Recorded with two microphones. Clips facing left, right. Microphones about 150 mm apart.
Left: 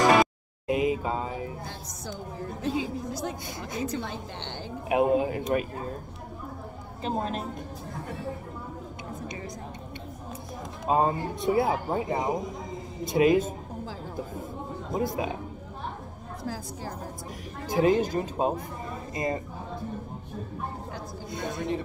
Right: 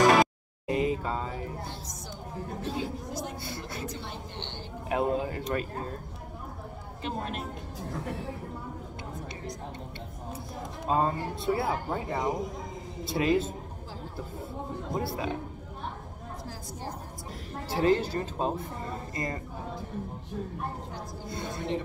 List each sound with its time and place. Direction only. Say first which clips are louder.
0.1 s music: left 1 dB; 5° left (ahead or behind)
2.6 s a woman's voice: left 6 dB; 90° left
4.8 s speech: left 5 dB; 15° left (ahead or behind)
7.0 s speech: left 5 dB; 35° left (ahead or behind)
10.9 s speech: left 3 dB; 15° left (ahead or behind)
15.0 s speech: left 4 dB; 15° left (ahead or behind)
17.6 s speech: left 3 dB; 15° left (ahead or behind)